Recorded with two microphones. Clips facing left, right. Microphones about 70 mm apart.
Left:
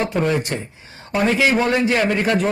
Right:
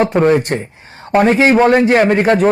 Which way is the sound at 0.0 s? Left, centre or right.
Right.